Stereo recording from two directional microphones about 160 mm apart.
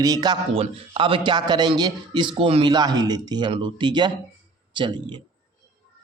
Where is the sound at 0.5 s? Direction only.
35° right (ahead or behind).